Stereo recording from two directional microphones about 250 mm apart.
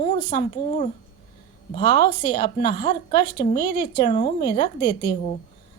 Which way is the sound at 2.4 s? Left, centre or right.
Left.